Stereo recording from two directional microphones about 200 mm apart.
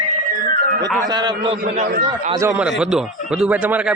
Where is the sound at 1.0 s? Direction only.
20° right (ahead or behind).